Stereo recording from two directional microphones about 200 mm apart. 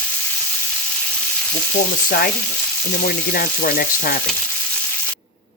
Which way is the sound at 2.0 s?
45° left (ahead or behind).